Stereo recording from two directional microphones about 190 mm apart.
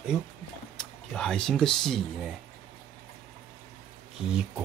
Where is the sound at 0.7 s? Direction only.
5° left (ahead or behind).